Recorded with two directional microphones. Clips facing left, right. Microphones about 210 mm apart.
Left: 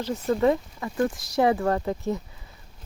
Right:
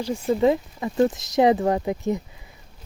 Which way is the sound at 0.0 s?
15° right (ahead or behind).